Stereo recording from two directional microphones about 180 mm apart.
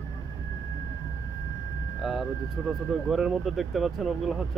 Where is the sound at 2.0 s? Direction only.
Centre (ahead or behind).